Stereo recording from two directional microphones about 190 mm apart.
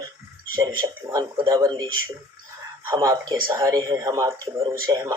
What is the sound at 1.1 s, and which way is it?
Speech, 20° right (ahead or behind).